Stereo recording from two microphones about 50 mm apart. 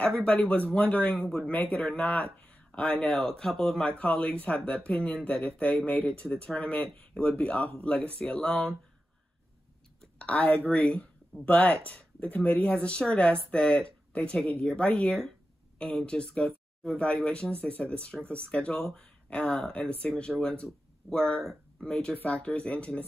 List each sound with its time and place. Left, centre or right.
0.1 s speech: left
1.3 s speech: left
3.2 s speech: centre
3.8 s speech: left
10.1 s speech: left
12.6 s speech: left
22.1 s speech: left